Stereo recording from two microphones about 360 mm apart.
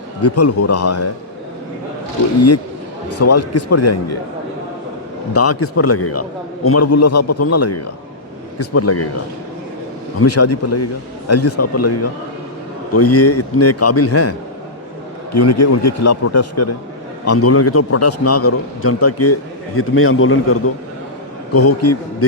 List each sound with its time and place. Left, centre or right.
0.2 s a man's voice: left
3.1 s a man's voice: left
5.3 s a man's voice: left
10.2 s a man's voice: left